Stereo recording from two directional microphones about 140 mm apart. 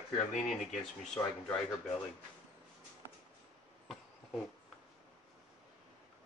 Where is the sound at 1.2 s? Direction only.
15° left (ahead or behind).